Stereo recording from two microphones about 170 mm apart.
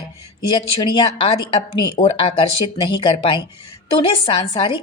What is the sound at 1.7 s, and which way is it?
Speech, 30° left (ahead or behind).